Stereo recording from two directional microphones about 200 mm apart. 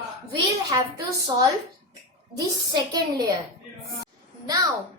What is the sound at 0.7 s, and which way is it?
Speech, 20° right (ahead or behind).